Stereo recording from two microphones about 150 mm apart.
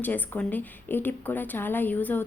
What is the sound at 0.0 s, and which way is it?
A woman's voice, 10° left (ahead or behind).